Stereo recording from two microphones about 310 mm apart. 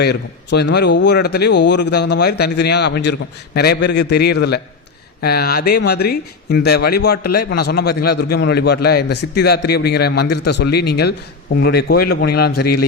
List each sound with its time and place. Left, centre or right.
0.0 s a man's voice: left